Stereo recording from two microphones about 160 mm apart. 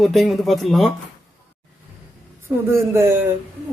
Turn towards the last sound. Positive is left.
turn(degrees=-15)  # may be behind; listen again after turning